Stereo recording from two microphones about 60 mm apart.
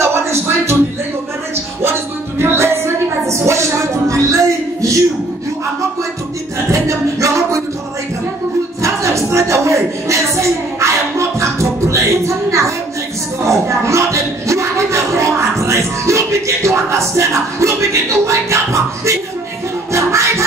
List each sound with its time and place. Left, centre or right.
0.0 s music: right
1.8 s music: right
6.7 s music: right
8.8 s a sound: right
19.9 s music: right